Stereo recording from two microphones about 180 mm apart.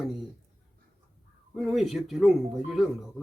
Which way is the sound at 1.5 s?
Centre (ahead or behind).